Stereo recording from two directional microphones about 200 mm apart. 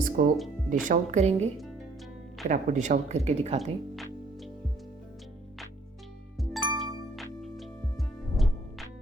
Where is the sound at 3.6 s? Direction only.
Centre (ahead or behind).